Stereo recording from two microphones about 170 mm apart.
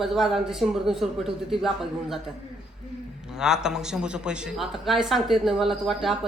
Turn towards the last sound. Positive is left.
turn(degrees=0)  # may be behind; listen again after turning